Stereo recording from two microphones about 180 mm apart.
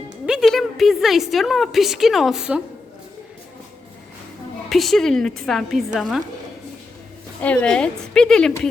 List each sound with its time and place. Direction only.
0.3 s a woman's voice: centre (ahead or behind)
4.7 s a woman's voice: centre (ahead or behind)
7.4 s a woman's voice: 5° left (ahead or behind)